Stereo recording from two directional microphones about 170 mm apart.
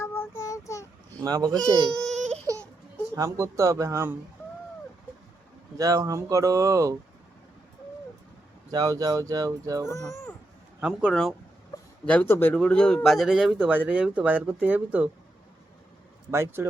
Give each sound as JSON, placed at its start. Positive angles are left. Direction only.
{"t": 0.0, "sound": "child singing", "side_deg": 15}
{"t": 1.2, "sound": "speech", "side_deg": -20}
{"t": 1.5, "sound": "speech", "side_deg": 5}
{"t": 2.1, "sound": "baby cry", "side_deg": -45}
{"t": 3.2, "sound": "speech", "side_deg": -15}
{"t": 5.7, "sound": "speech", "side_deg": -20}
{"t": 8.7, "sound": "speech", "side_deg": -20}
{"t": 9.8, "sound": "speech", "side_deg": 15}
{"t": 10.8, "sound": "speech", "side_deg": -5}
{"t": 16.3, "sound": "speech", "side_deg": -15}